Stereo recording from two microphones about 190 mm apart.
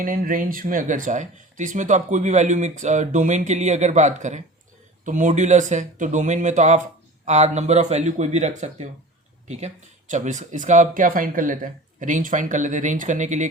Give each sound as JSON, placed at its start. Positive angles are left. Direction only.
{"t": 0.0, "sound": "speech", "side_deg": -45}